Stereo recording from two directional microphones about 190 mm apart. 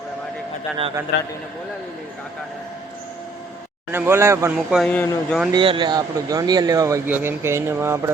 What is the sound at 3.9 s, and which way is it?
Speech, 10° right (ahead or behind).